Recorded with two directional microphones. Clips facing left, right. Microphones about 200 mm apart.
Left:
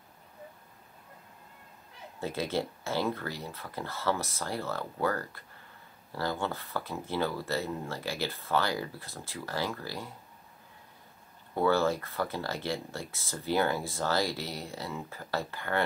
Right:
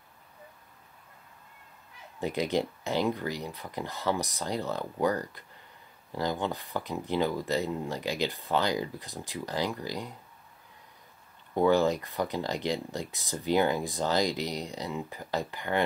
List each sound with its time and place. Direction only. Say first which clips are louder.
2.1 s speech: right 3 dB; 15° right (ahead or behind)
11.5 s speech: right 3 dB; 15° right (ahead or behind)